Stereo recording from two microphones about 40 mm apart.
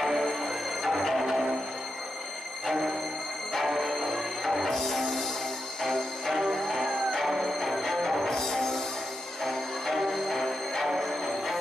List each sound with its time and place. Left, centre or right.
0.0 s music: centre
3.6 s music: centre